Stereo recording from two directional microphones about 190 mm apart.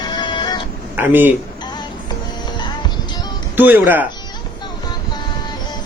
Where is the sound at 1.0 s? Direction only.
10° right (ahead or behind).